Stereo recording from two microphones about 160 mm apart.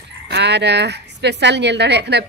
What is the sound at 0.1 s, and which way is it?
Speech, 90° right.